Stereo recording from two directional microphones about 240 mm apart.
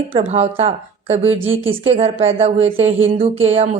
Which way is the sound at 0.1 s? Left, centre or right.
Right.